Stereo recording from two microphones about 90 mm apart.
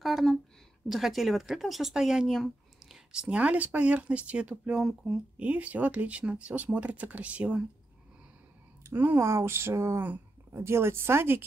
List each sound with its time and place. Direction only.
0.0 s speech: centre (ahead or behind)
8.8 s speech: 25° right (ahead or behind)